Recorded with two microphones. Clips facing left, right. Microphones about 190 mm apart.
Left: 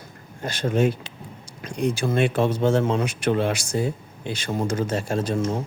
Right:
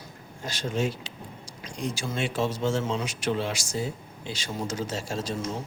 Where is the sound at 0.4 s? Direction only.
55° left (ahead or behind).